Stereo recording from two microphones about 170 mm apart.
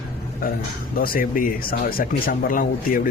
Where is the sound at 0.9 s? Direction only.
60° left (ahead or behind).